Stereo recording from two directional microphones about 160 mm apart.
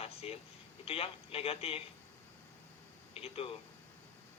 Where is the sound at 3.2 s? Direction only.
40° left (ahead or behind).